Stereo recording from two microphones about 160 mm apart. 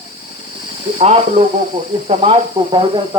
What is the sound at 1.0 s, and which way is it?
Speech, 40° right (ahead or behind).